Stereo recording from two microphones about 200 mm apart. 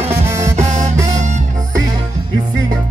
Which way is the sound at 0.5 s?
35° right (ahead or behind).